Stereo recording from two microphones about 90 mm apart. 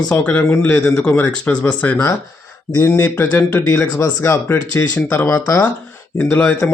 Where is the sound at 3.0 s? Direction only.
20° left (ahead or behind); by 5.6 s 35° left (ahead or behind).